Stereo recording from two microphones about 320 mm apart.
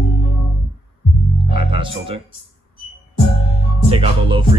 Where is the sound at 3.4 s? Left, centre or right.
Centre.